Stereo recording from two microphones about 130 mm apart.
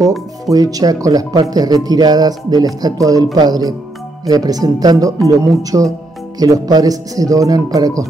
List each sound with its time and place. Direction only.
0.5 s a man's voice: 30° right (ahead or behind)